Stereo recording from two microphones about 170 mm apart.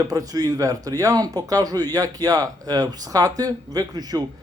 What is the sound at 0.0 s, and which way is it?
A man's voice, 20° right (ahead or behind).